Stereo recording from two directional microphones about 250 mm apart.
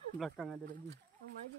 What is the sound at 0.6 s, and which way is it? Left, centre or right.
Speech, right.